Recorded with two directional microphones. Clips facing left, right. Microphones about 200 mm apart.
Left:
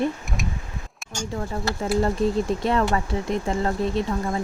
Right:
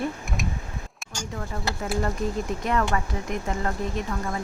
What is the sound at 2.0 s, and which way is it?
Speech, 30° left (ahead or behind).